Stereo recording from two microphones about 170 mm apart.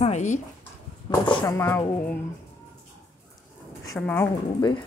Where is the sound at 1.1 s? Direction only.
25° left (ahead or behind).